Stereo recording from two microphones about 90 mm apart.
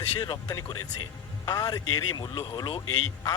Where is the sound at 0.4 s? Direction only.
45° left (ahead or behind).